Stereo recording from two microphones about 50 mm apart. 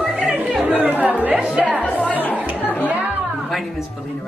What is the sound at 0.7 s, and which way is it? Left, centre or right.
Chatter, right.